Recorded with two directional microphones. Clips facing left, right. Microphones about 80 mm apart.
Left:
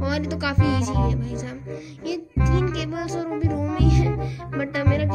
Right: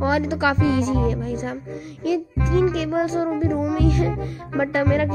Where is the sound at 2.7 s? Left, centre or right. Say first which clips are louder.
Right 6 dB; right.